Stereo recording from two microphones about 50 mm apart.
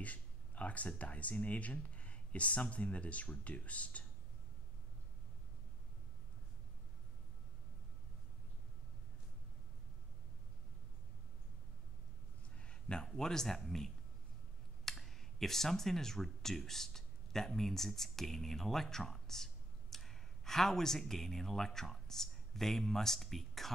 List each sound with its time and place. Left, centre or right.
0.0 s speech: left
12.5 s a sound: left
13.7 s speech: centre